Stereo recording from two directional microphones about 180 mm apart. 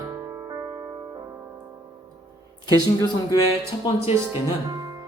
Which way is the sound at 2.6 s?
20° left (ahead or behind).